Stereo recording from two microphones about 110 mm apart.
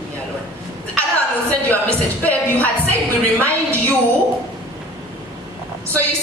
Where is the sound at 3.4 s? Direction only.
15° left (ahead or behind).